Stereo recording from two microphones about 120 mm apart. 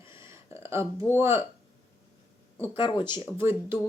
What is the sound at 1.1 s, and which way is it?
Speech, 20° right (ahead or behind).